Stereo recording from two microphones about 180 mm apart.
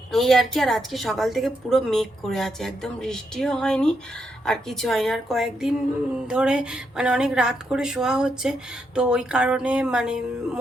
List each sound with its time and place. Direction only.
0.1 s speech: centre (ahead or behind)